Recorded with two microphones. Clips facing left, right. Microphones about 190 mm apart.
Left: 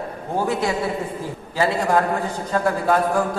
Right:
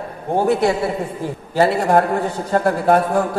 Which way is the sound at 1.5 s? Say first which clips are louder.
Right 4 dB; 60° right (ahead or behind).